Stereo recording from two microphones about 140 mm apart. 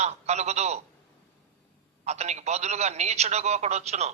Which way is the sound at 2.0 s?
55° right (ahead or behind).